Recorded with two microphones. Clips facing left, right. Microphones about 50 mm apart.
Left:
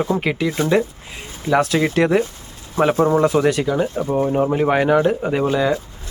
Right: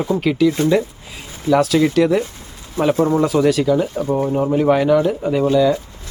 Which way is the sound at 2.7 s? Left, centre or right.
Centre.